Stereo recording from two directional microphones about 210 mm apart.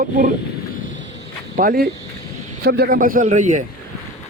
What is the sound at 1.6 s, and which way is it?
Speech, 40° right (ahead or behind).